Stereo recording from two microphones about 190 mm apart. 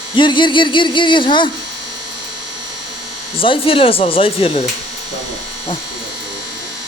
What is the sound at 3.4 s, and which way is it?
Speech, 30° left (ahead or behind).